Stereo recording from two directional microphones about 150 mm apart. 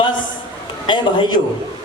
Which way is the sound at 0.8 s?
35° left (ahead or behind).